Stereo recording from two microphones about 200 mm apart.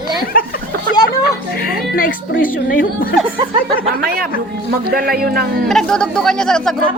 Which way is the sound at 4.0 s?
50° right (ahead or behind).